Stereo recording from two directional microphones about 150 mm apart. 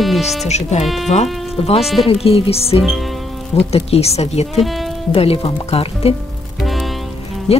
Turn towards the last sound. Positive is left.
turn(degrees=45)  # may be behind; listen again after turning